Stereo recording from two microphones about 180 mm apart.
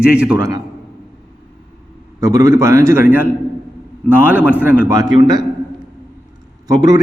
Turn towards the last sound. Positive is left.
turn(degrees=-20)  # may be behind; listen again after turning